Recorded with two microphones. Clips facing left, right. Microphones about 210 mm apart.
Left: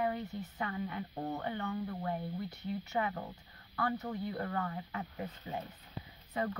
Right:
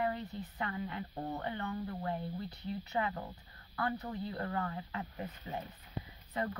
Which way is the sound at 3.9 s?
20° left (ahead or behind).